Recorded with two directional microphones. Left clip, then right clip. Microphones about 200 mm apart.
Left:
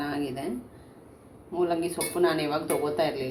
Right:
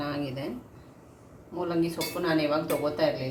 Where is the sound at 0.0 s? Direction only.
20° left (ahead or behind).